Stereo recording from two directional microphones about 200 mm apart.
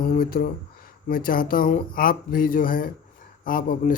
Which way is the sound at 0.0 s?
45° left (ahead or behind).